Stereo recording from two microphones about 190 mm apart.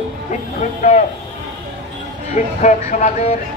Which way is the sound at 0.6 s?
35° left (ahead or behind).